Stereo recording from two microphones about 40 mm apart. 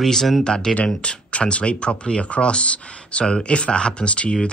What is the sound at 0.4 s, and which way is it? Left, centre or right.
Speech, left.